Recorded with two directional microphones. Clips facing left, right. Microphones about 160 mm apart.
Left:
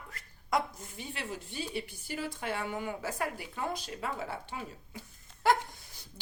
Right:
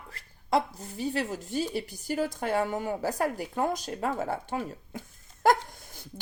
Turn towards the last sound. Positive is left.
turn(degrees=-45)  # may be behind; listen again after turning